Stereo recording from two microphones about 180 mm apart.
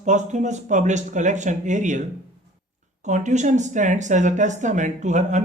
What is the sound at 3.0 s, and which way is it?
Speech, 40° right (ahead or behind).